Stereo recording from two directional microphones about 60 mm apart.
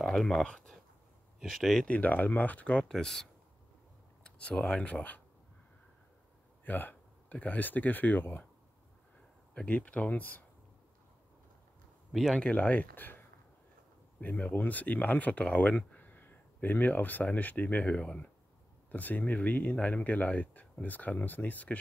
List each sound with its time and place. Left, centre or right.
0.0 s speech: centre
1.9 s speech: left
2.9 s speech: centre
4.2 s speech: centre
6.6 s speech: left
9.5 s speech: left
12.1 s speech: centre
12.4 s speech: centre
14.2 s speech: left
18.9 s speech: left